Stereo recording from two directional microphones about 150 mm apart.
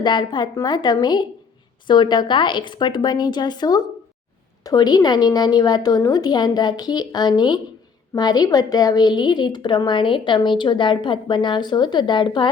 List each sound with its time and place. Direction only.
0.0 s a woman's voice: 30° left (ahead or behind)